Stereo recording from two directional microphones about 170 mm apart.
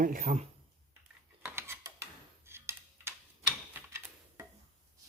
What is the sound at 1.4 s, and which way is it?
Cutlery, 15° right (ahead or behind).